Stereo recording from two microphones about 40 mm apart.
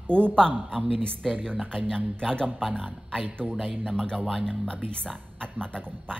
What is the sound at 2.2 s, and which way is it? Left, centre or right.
Speech, centre.